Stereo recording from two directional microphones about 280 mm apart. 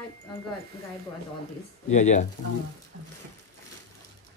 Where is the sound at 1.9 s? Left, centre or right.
Left.